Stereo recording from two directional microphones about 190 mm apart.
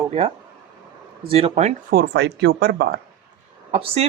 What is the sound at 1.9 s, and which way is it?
Speech, 55° right (ahead or behind).